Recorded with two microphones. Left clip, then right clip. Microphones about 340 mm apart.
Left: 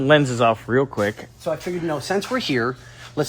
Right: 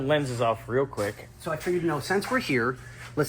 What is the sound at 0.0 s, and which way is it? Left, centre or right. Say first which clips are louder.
Speech: left 9 dB; left.